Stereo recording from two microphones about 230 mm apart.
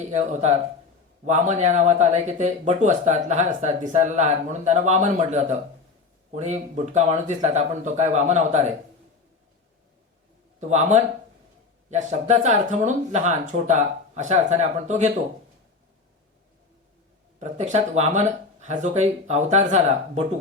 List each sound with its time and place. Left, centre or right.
0.1 s speech: right
10.6 s speech: right
17.4 s speech: right